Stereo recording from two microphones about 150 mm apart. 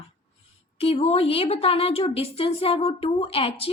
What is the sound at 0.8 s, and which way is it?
Speech, 45° left (ahead or behind).